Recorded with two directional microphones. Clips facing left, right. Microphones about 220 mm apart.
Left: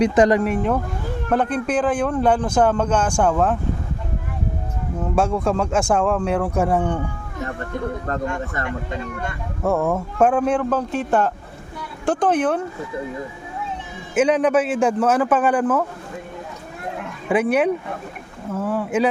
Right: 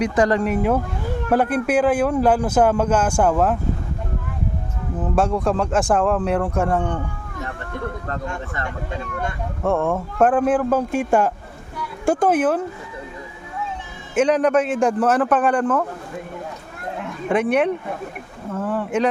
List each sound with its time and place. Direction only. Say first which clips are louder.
0.2 s speech: left 2 dB; 15° left (ahead or behind)
0.4 s a man's voice: right 1 dB; 5° right (ahead or behind)
5.1 s a man's voice: even; centre (ahead or behind)
8.0 s speech: left 4 dB; 40° left (ahead or behind)
9.6 s a man's voice: even; 5° left (ahead or behind)
14.2 s a man's voice: even; 5° left (ahead or behind)
17.2 s a man's voice: even; 5° left (ahead or behind)